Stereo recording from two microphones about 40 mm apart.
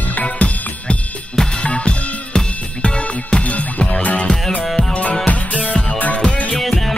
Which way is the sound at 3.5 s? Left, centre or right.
Left.